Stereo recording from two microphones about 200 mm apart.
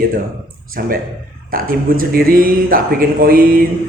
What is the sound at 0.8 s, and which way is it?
Speech, 50° right (ahead or behind).